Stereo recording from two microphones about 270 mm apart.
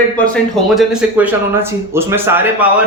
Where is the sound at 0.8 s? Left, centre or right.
Centre.